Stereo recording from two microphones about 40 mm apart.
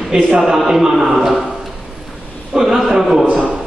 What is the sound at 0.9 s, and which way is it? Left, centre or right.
Speech, centre.